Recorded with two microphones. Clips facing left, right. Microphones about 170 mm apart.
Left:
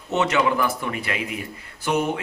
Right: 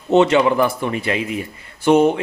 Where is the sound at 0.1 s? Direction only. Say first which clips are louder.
Right 7 dB; 30° right (ahead or behind).